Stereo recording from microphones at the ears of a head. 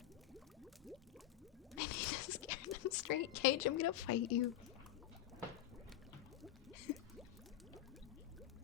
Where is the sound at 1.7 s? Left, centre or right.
Left.